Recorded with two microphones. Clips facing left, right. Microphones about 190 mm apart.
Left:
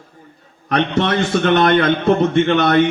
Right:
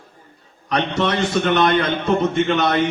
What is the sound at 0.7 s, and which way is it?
A man's voice, 55° left (ahead or behind).